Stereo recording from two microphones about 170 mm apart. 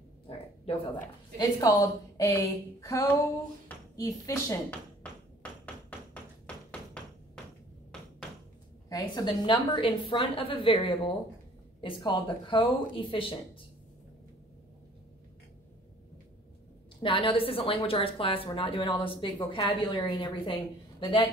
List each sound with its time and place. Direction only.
0.7 s a woman's voice: 35° left (ahead or behind)
1.4 s a woman's voice: 20° left (ahead or behind)
6.4 s a sound: 5° left (ahead or behind)
8.8 s a woman's voice: 20° left (ahead or behind)
17.0 s a woman's voice: 30° left (ahead or behind)